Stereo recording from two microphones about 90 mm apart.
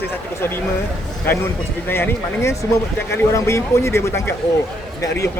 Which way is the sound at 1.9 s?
25° left (ahead or behind).